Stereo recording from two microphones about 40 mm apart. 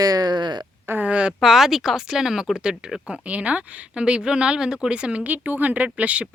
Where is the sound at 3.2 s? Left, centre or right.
Right.